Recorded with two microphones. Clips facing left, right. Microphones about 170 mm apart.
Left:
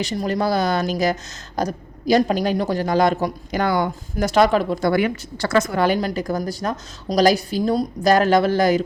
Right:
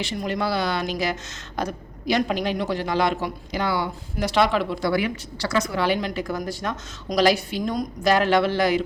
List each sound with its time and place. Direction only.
0.0 s a woman's voice: 40° left (ahead or behind)